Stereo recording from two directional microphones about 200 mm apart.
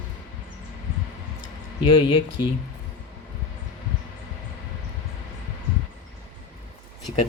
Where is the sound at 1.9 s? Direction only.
20° left (ahead or behind).